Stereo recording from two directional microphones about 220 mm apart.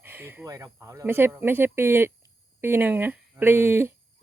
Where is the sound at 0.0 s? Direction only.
10° right (ahead or behind).